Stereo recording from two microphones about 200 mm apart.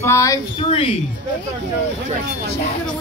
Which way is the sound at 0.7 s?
25° left (ahead or behind).